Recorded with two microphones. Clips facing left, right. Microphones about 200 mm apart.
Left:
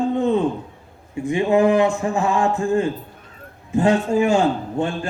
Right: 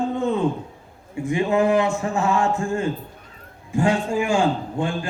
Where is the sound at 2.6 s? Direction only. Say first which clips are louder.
Left 5 dB; 35° left (ahead or behind).